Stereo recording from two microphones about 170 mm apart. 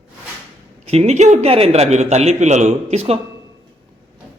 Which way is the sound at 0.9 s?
40° right (ahead or behind).